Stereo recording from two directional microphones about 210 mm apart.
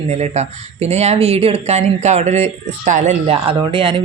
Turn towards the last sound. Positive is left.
turn(degrees=-25)  # may be behind; listen again after turning